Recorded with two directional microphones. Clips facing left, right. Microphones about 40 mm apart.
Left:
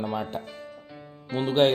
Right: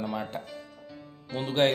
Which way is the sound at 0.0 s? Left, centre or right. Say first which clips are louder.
Left 3 dB; centre.